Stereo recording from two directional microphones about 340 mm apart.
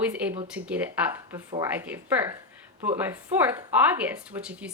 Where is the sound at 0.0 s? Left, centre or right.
Centre.